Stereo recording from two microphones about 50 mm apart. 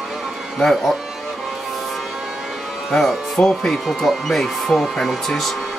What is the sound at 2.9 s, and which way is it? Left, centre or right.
Speech, centre.